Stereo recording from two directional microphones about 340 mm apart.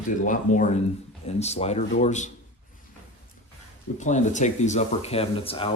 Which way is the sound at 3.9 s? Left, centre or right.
Left.